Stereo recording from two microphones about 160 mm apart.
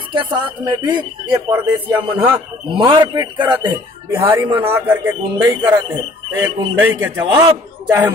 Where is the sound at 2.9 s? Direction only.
25° right (ahead or behind).